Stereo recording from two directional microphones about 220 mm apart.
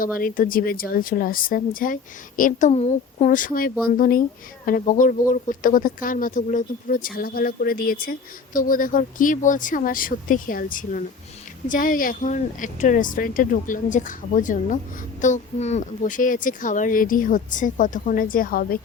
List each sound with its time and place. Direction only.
0.0 s a woman's voice: 40° left (ahead or behind)